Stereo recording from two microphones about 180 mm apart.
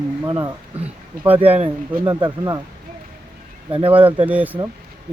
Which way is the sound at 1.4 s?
30° right (ahead or behind).